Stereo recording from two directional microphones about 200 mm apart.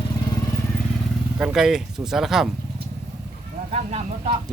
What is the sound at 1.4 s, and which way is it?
Speech, 5° right (ahead or behind).